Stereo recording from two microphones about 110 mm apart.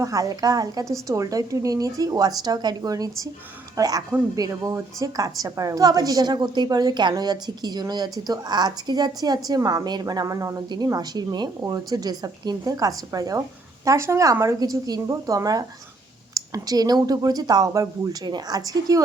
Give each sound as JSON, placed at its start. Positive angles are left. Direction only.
{"t": 0.0, "sound": "a woman's voice", "side_deg": -30}